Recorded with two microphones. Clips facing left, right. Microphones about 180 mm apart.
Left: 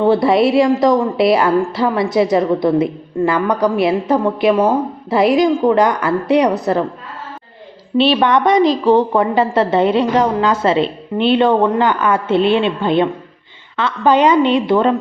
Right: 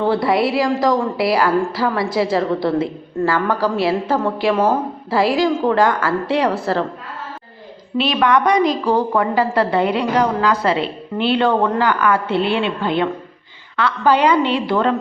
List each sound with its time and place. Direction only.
0.0 s a woman's voice: 25° left (ahead or behind)
7.9 s a woman's voice: 30° left (ahead or behind)